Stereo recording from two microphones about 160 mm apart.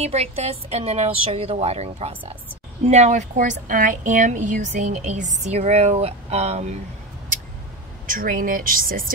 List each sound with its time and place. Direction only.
0.0 s a woman's voice: 40° right (ahead or behind)
8.1 s speech: 60° right (ahead or behind)